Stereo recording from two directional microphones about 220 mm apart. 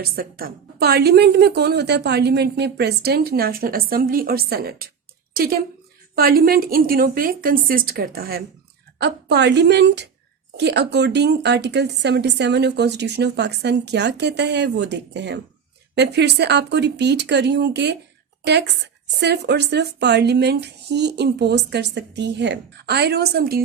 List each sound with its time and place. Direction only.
0.0 s a woman's voice: 40° right (ahead or behind)